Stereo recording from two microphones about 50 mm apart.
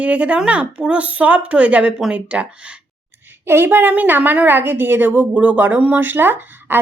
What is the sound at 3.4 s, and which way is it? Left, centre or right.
A woman's voice, right.